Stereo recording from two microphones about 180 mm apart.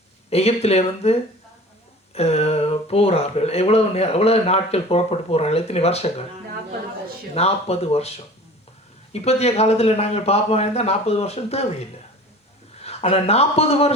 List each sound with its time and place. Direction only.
0.3 s speech: 35° left (ahead or behind)
7.3 s speech: 35° left (ahead or behind)